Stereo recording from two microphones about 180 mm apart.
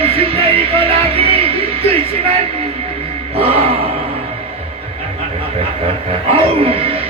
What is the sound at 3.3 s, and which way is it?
Speech, 30° right (ahead or behind).